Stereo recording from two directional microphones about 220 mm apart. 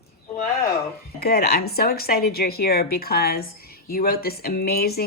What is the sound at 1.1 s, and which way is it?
Speech, 45° left (ahead or behind).